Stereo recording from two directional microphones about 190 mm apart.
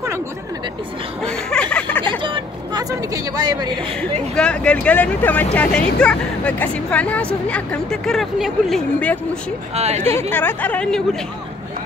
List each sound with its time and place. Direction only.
1.2 s a sound: 5° left (ahead or behind)
2.0 s vehicle: 25° right (ahead or behind)
3.3 s speech: 20° right (ahead or behind)
4.0 s speech: 5° left (ahead or behind)
9.8 s a woman's voice: 35° right (ahead or behind)
10.0 s speech: 10° left (ahead or behind)